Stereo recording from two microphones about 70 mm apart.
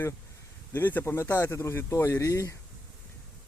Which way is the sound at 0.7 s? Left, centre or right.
Left.